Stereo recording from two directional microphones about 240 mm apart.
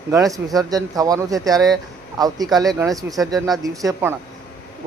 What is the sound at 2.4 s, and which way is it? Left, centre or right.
Speech, centre.